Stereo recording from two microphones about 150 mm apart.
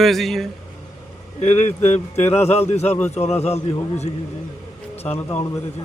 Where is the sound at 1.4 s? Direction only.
50° left (ahead or behind).